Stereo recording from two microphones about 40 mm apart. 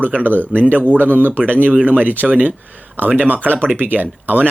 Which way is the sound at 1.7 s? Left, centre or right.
Right.